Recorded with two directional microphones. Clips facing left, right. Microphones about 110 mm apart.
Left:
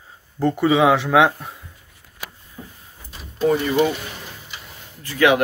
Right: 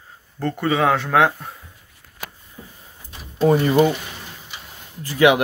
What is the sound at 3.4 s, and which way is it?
Speech, 35° right (ahead or behind).